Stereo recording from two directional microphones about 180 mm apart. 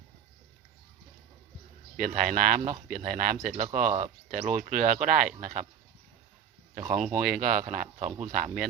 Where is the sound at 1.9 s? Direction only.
50° right (ahead or behind).